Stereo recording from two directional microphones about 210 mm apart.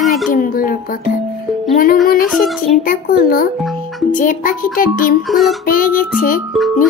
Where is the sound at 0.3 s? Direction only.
40° left (ahead or behind).